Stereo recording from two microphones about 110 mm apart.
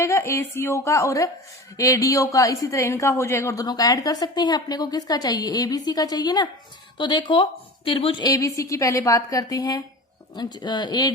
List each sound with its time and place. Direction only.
0.0 s a woman's voice: 25° left (ahead or behind); by 7.4 s 50° left (ahead or behind)
8.2 s speech: 30° left (ahead or behind)